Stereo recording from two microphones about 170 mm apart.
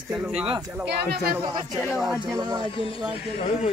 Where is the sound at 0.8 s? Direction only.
65° right (ahead or behind).